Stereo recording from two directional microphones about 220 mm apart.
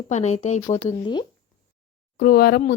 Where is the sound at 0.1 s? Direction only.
30° left (ahead or behind).